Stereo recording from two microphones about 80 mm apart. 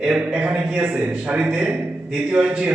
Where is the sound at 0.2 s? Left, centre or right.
Centre.